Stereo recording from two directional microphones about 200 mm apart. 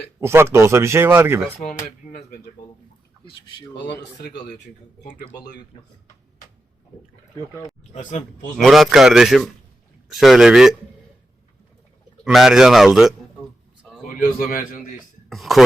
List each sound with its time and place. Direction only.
0.2 s speech: 15° right (ahead or behind)
4.2 s a man's voice: 55° left (ahead or behind)
8.5 s a man's voice: centre (ahead or behind)
12.2 s a man's voice: centre (ahead or behind)
14.3 s a man's voice: 45° left (ahead or behind)
15.3 s a man's voice: centre (ahead or behind)